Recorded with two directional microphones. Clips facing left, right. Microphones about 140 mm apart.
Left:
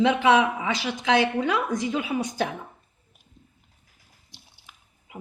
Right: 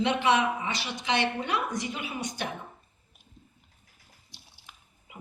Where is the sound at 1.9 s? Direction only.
90° left.